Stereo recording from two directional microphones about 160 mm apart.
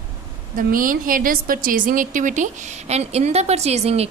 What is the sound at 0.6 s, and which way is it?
A woman's voice, 60° right (ahead or behind).